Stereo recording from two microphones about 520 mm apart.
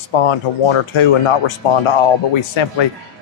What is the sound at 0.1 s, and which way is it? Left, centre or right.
Speech, left.